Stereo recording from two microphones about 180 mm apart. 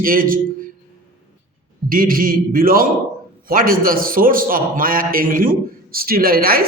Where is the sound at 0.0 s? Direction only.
50° right (ahead or behind).